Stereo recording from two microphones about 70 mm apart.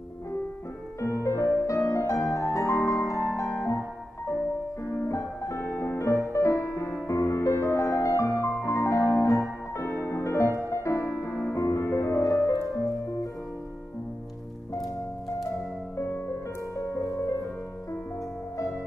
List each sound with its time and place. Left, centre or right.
1.0 s music: left
4.8 s music: left
16.7 s music: left